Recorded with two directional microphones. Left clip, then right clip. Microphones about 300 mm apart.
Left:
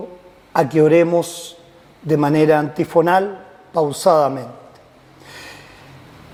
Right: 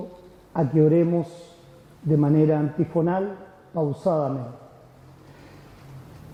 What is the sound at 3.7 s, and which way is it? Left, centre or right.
Speech, centre.